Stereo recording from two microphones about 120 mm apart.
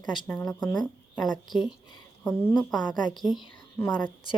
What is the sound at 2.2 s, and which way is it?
Speech, 15° left (ahead or behind).